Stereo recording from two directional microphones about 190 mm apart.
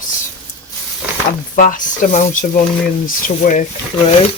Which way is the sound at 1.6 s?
45° left (ahead or behind).